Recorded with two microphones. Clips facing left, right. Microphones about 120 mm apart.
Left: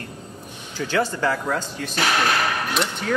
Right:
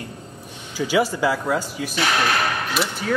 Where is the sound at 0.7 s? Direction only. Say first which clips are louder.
Right 3 dB; 10° right (ahead or behind).